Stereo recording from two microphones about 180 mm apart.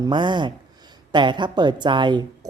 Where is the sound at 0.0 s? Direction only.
25° right (ahead or behind).